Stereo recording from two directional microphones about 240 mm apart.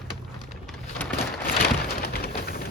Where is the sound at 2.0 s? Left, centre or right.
Left.